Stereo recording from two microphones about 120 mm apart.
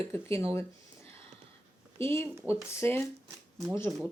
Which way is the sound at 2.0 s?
20° left (ahead or behind).